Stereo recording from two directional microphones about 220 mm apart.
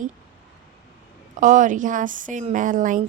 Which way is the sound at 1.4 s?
35° right (ahead or behind).